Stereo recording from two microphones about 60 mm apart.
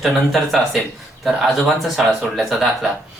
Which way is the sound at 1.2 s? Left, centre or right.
Centre.